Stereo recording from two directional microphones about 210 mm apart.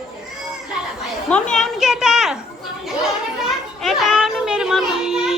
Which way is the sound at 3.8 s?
Centre (ahead or behind).